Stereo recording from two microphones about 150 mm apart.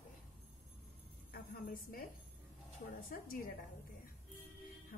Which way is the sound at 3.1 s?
70° left (ahead or behind).